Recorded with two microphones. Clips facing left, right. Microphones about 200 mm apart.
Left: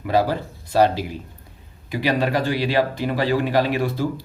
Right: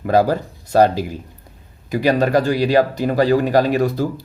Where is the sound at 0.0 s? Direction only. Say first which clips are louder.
Right 4 dB; 45° right (ahead or behind).